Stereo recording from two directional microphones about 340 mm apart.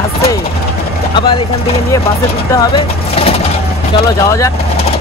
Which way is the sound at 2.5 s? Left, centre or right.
Centre.